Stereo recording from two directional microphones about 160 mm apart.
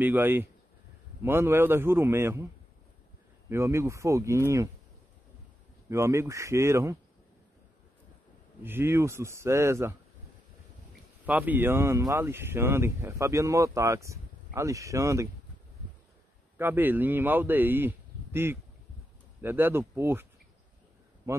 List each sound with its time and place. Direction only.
0.0 s speech: 10° right (ahead or behind)
3.4 s speech: 15° right (ahead or behind)
5.9 s speech: 15° right (ahead or behind)
8.6 s speech: 15° right (ahead or behind)
11.2 s speech: 10° right (ahead or behind)
16.5 s a man's voice: 15° right (ahead or behind)
21.3 s a man's voice: 15° right (ahead or behind)